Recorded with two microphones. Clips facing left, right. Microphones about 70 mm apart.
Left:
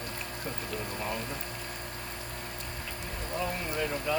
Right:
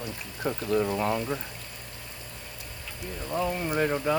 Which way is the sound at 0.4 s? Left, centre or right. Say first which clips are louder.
Right 13 dB; right.